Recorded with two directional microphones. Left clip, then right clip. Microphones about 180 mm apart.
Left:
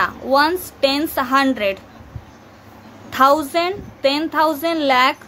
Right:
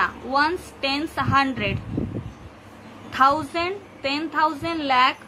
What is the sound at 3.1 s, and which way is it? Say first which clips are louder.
A woman's voice: left 5 dB; 65° left (ahead or behind).